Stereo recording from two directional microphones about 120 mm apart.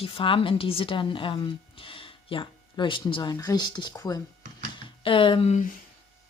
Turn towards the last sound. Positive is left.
turn(degrees=45)  # may be behind; listen again after turning